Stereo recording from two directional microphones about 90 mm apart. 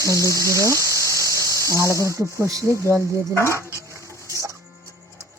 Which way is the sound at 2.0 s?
35° right (ahead or behind).